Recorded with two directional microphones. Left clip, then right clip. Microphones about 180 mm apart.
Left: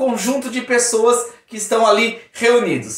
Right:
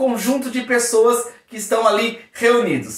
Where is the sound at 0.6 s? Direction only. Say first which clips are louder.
Even; 15° left (ahead or behind).